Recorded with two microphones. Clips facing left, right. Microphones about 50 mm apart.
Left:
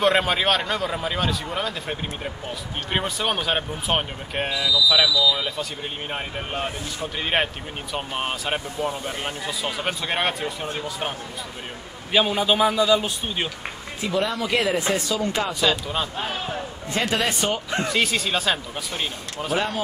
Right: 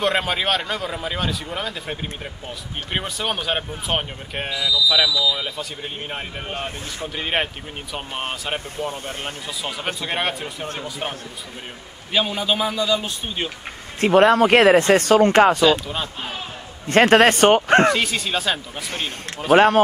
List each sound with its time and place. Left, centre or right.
0.0 s speech: centre
12.1 s a man's voice: centre
14.0 s speech: right
16.9 s speech: right
17.9 s speech: centre
18.9 s speech: right